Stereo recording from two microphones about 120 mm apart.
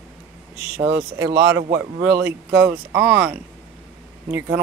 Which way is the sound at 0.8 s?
25° right (ahead or behind).